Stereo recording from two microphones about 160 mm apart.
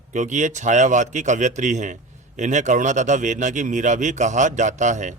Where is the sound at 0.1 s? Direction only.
50° right (ahead or behind).